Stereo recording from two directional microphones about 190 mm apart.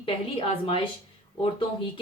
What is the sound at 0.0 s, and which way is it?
Speech, 30° left (ahead or behind).